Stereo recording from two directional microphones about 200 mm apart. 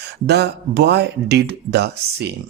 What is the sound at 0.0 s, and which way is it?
Speech, 55° right (ahead or behind).